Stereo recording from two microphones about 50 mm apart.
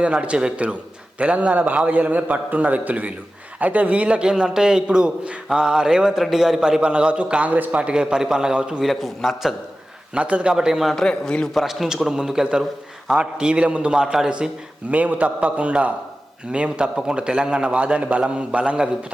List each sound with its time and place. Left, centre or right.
0.0 s a man's voice: right
6.1 s a man's voice: centre
8.8 s a man's voice: centre
10.2 s a man's voice: right
10.5 s a man's voice: centre
11.1 s a man's voice: centre
11.5 s a man's voice: centre